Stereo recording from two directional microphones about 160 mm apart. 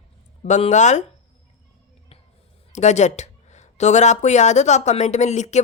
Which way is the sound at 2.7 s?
45° left (ahead or behind).